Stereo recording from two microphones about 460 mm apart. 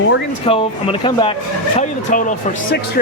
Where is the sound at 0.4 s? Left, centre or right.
Centre.